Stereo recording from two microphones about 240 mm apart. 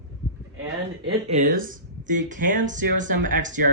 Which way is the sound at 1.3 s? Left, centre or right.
Right.